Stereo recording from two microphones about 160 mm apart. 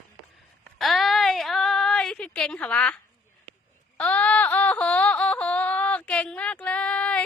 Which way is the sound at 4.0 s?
10° left (ahead or behind).